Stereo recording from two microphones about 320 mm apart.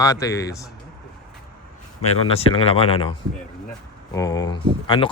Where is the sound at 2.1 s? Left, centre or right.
Centre.